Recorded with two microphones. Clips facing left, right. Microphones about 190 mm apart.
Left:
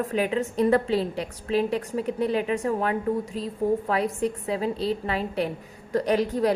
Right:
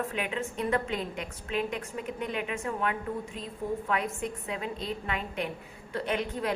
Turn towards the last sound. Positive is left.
turn(degrees=35)  # may be behind; listen again after turning